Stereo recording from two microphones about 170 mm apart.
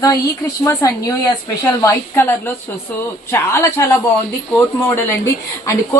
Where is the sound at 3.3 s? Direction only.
15° left (ahead or behind).